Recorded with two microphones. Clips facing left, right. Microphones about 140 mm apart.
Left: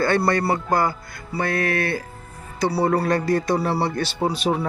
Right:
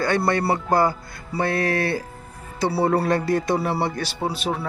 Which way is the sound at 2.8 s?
5° right (ahead or behind).